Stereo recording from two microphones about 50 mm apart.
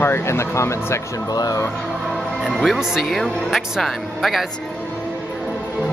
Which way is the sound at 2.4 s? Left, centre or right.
Centre.